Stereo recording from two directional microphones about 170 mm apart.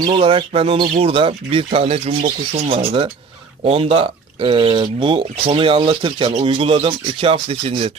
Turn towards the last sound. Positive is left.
turn(degrees=-35)  # may be behind; listen again after turning